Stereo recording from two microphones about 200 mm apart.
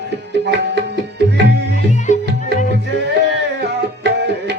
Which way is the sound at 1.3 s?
60° right (ahead or behind).